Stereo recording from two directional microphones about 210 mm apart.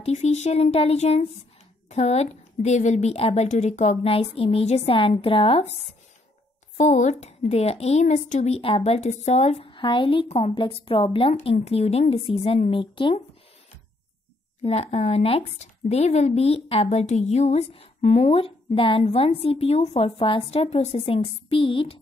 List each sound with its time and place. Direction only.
0.0 s a woman's voice: 30° left (ahead or behind)
6.8 s speech: 35° left (ahead or behind)
14.6 s speech: 30° left (ahead or behind)